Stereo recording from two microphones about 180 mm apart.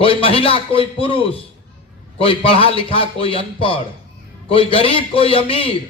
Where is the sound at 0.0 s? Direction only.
30° left (ahead or behind).